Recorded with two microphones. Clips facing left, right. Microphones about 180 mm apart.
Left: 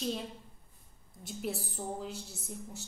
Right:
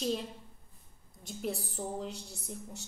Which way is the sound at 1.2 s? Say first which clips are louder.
Right 1 dB; centre (ahead or behind).